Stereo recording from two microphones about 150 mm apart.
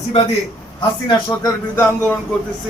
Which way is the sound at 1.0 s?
20° left (ahead or behind).